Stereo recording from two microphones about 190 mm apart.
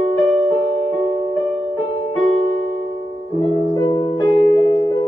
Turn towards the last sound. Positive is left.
turn(degrees=20)  # may be behind; listen again after turning